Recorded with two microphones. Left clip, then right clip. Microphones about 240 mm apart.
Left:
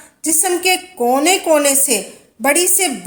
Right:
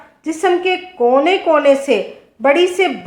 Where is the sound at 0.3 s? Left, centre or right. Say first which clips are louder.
Right 1 dB; left.